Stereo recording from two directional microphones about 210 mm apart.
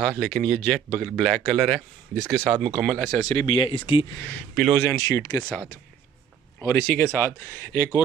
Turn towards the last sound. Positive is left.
turn(degrees=10)  # may be behind; listen again after turning